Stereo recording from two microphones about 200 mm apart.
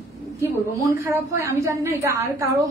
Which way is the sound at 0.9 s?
15° right (ahead or behind).